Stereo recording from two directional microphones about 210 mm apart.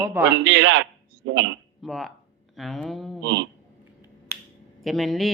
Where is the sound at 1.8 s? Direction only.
Centre (ahead or behind).